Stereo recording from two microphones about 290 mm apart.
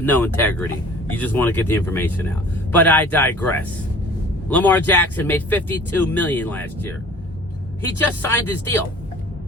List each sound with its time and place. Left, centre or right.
0.0 s speech: centre